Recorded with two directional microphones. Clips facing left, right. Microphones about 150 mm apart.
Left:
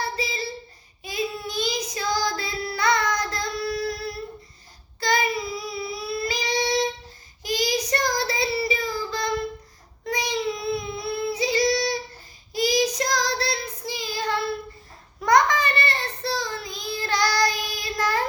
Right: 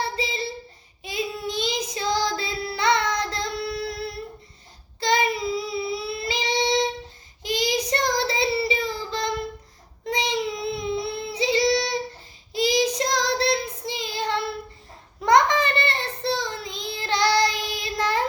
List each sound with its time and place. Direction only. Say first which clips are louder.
0.0 s child singing: right 1 dB; 25° right (ahead or behind)
4.9 s child singing: right 1 dB; 25° right (ahead or behind)